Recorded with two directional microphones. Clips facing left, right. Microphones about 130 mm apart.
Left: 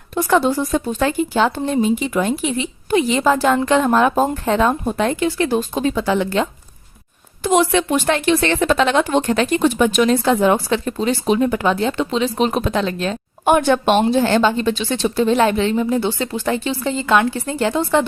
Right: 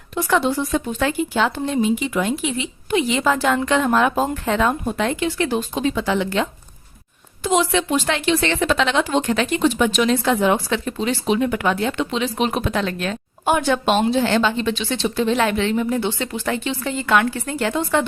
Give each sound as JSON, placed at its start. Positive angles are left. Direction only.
{"t": 0.1, "sound": "a woman's voice", "side_deg": 40}
{"t": 7.4, "sound": "a woman's voice", "side_deg": 55}
{"t": 13.4, "sound": "speech", "side_deg": 55}
{"t": 14.0, "sound": "a woman's voice", "side_deg": 40}